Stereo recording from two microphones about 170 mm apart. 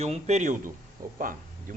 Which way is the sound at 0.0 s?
40° right (ahead or behind).